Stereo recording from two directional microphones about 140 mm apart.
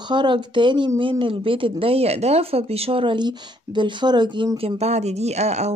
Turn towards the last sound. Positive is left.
turn(degrees=-50)  # may be behind; listen again after turning